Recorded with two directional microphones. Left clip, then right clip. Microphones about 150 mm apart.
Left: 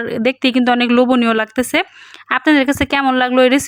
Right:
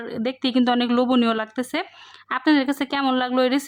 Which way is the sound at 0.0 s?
30° left (ahead or behind).